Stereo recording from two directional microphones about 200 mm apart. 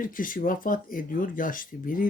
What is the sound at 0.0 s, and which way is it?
Speech, 45° left (ahead or behind).